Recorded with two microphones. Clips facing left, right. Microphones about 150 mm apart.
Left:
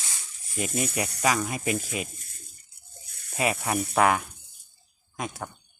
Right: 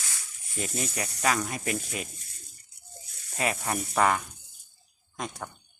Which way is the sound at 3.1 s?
55° left (ahead or behind).